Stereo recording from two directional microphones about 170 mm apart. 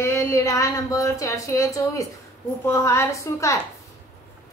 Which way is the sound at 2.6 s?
15° left (ahead or behind).